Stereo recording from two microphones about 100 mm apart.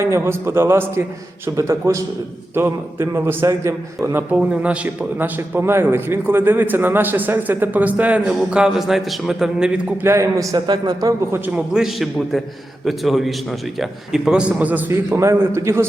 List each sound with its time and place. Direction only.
0.0 s a man's voice: 25° right (ahead or behind)
4.4 s a man's voice: 10° right (ahead or behind)
10.0 s a man's voice: 30° right (ahead or behind)
11.5 s a man's voice: 5° right (ahead or behind); by 15.9 s 25° right (ahead or behind)